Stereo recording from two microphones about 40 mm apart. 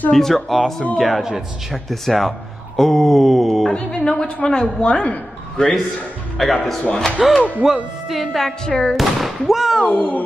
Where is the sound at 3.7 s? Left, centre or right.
Left.